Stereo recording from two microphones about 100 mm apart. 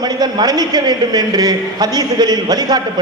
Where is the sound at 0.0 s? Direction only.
45° right (ahead or behind).